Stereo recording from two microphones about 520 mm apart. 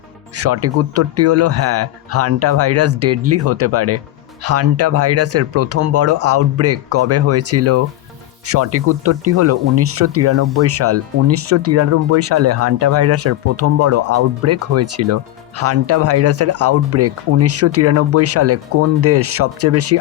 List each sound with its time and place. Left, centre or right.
0.3 s speech: right